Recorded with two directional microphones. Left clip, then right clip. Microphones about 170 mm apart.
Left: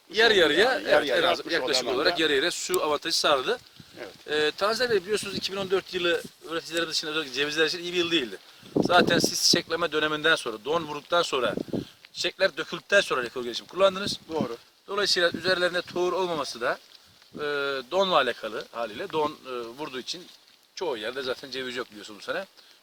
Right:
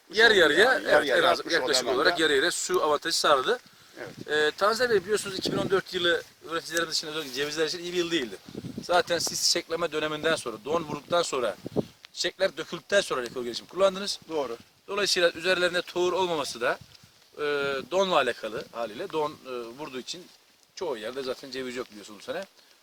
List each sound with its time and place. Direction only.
0.1 s speech: 10° left (ahead or behind); by 14.2 s 5° right (ahead or behind)
14.8 s speech: 35° right (ahead or behind)
18.7 s speech: 10° right (ahead or behind)
19.0 s speech: 5° left (ahead or behind)